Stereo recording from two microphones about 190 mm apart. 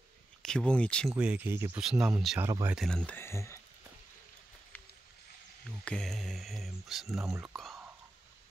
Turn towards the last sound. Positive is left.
turn(degrees=0)  # may be behind; listen again after turning